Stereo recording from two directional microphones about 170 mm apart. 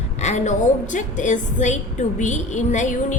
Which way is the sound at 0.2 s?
40° left (ahead or behind).